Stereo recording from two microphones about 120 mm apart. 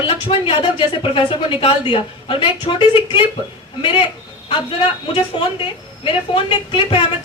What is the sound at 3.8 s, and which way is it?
Speech, 45° left (ahead or behind).